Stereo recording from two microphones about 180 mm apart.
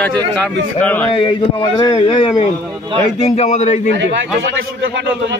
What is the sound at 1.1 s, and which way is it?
A man's voice, 30° left (ahead or behind).